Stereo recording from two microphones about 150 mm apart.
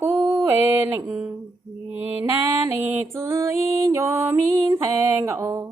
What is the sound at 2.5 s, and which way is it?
Music, 15° right (ahead or behind).